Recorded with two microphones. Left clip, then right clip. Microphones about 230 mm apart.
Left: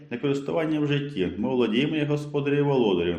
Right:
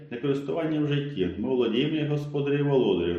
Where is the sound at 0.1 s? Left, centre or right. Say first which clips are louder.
Left 2 dB; left.